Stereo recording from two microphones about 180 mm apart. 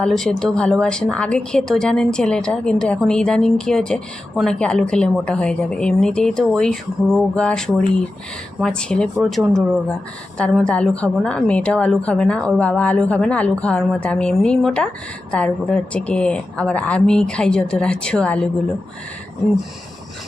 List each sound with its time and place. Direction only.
0.0 s speech: 5° left (ahead or behind)